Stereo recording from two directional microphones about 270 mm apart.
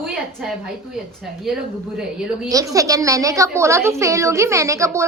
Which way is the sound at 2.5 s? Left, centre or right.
Centre.